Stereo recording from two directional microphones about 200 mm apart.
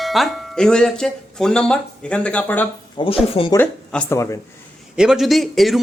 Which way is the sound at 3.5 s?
5° left (ahead or behind).